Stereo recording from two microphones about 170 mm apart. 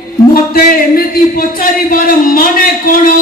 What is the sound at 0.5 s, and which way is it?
Speech, 60° left (ahead or behind).